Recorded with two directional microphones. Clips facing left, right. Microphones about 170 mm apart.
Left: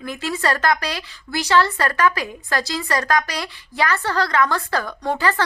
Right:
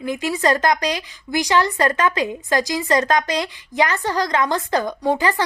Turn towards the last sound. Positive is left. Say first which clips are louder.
# right 2 dB
turn(degrees=-15)  # may be behind; listen again after turning